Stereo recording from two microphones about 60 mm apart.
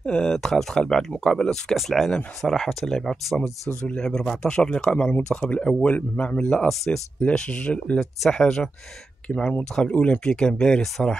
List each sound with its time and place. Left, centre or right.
0.0 s speech: centre
6.7 s speech: centre
7.2 s speech: centre
8.0 s speech: centre
9.8 s speech: centre